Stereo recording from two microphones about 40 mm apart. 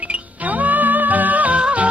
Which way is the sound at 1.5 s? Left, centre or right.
Right.